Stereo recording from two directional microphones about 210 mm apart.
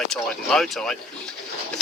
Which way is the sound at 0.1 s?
Centre (ahead or behind).